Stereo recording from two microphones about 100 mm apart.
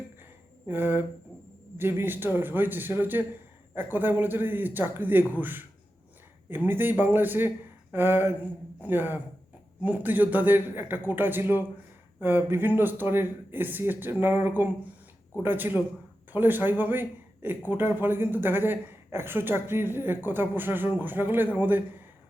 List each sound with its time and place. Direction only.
0.7 s a man's voice: 20° right (ahead or behind)